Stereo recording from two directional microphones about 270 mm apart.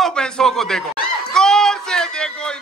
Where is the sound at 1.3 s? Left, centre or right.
Centre.